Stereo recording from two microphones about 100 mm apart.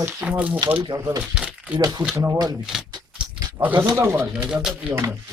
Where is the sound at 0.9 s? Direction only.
30° right (ahead or behind).